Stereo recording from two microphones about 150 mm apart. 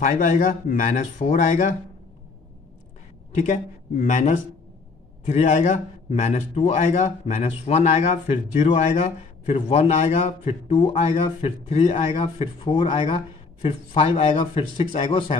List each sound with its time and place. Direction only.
0.0 s speech: 60° left (ahead or behind)
4.0 s speech: 50° left (ahead or behind)